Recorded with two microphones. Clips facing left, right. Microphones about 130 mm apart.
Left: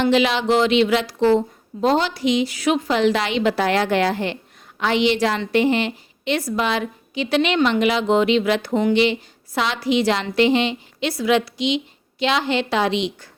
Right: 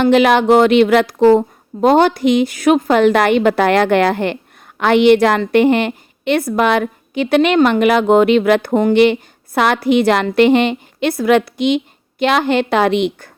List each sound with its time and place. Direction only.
0.0 s a woman's voice: 55° right (ahead or behind)